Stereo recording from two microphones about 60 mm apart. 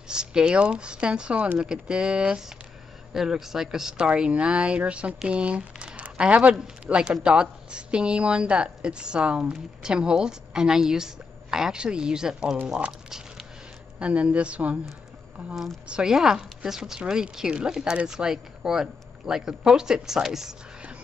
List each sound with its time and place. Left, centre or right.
0.1 s speech: centre
4.1 s speech: centre
12.6 s a sound: centre
13.9 s speech: centre
15.5 s speech: centre